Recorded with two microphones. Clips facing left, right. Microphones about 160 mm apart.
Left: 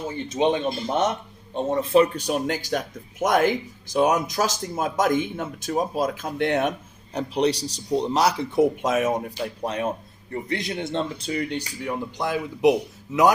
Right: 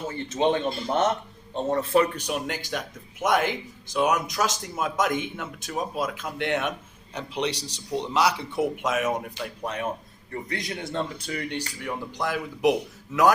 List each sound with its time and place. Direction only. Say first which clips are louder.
0.1 s speech: left 1 dB; 15° left (ahead or behind)